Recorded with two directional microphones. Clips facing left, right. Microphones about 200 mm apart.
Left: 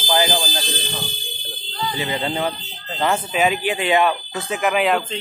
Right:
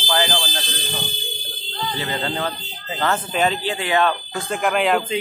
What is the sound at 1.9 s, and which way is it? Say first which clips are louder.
Speech: left 2 dB; 15° left (ahead or behind).